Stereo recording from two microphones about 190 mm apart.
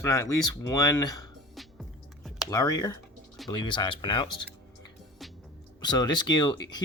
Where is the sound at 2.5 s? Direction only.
20° left (ahead or behind).